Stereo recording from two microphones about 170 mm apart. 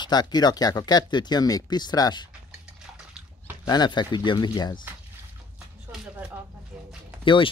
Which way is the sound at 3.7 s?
25° left (ahead or behind).